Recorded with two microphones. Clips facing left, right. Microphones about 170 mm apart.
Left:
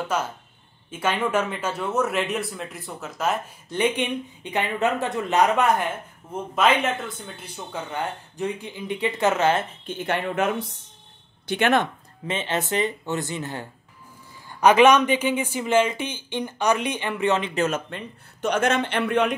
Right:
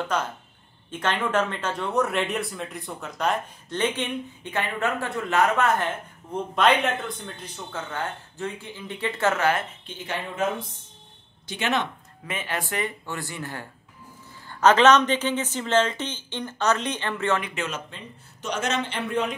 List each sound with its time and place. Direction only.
0.0 s speech: 5° left (ahead or behind)
6.5 s speech: centre (ahead or behind)
7.7 s speech: 15° left (ahead or behind)
9.8 s a man's voice: 60° left (ahead or behind)
12.3 s speech: 25° left (ahead or behind)
17.6 s a man's voice: 50° left (ahead or behind); by 19.3 s 70° left (ahead or behind)